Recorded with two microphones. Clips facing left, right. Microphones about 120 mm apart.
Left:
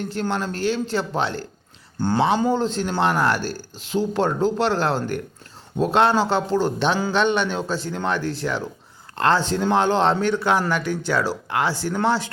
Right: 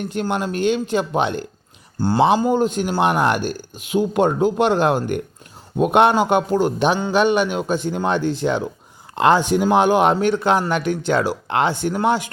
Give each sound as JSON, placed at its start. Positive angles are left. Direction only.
{"t": 0.0, "sound": "a man's voice", "side_deg": -20}